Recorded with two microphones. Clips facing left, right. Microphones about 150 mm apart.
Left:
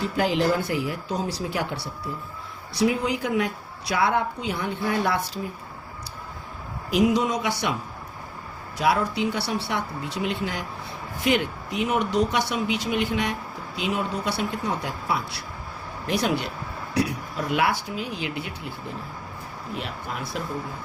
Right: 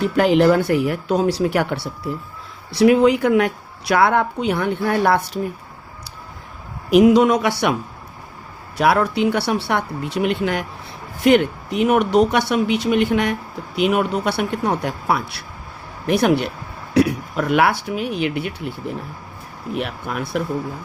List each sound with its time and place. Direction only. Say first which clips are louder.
0.0 s a woman's voice: right 8 dB; 65° right (ahead or behind)
6.9 s speech: right 9 dB; 65° right (ahead or behind)
8.8 s a woman's voice: right 6 dB; 65° right (ahead or behind)
19.7 s a woman's voice: right 8 dB; 65° right (ahead or behind)